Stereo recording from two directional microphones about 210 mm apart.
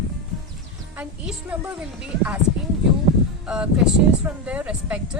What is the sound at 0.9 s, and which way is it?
A woman's voice, 5° right (ahead or behind).